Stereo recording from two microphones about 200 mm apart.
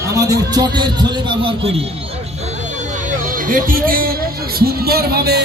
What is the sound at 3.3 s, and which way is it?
Speech, 45° right (ahead or behind).